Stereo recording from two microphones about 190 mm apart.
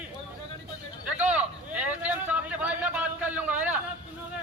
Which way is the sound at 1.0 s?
5° right (ahead or behind).